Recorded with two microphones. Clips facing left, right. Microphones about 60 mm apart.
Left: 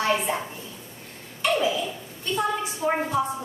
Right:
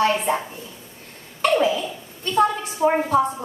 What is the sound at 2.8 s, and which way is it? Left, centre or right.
Speech, right.